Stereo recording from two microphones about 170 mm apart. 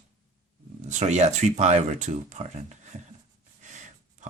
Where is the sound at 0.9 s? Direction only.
45° right (ahead or behind).